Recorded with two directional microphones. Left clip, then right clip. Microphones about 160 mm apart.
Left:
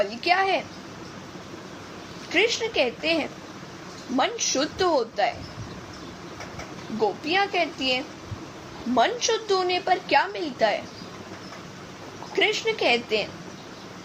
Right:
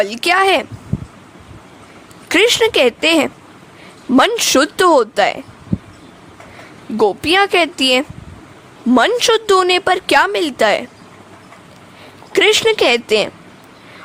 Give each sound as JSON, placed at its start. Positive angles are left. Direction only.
{"t": 0.0, "sound": "speech", "side_deg": -60}
{"t": 2.3, "sound": "speech", "side_deg": -65}
{"t": 4.2, "sound": "a woman's voice", "side_deg": -80}
{"t": 7.0, "sound": "a woman's voice", "side_deg": -70}
{"t": 12.3, "sound": "speech", "side_deg": -70}